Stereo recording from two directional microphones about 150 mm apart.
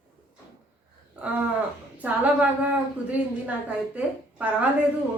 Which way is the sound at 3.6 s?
10° right (ahead or behind).